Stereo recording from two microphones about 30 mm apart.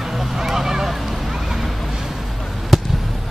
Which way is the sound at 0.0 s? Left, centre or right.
Centre.